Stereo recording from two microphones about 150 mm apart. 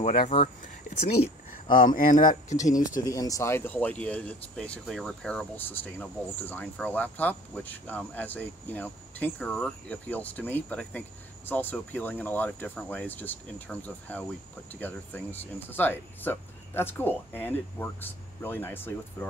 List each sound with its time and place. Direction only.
0.3 s speech: 50° left (ahead or behind)
1.8 s speech: 65° left (ahead or behind)
3.1 s speech: 20° left (ahead or behind)